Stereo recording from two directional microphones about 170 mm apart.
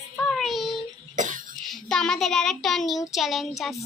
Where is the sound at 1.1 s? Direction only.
50° right (ahead or behind).